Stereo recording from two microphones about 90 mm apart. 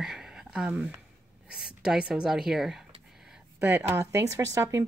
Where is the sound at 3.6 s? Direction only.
20° right (ahead or behind).